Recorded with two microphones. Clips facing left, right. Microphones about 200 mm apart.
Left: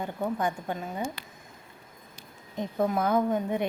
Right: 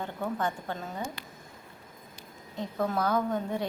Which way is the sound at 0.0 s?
15° left (ahead or behind).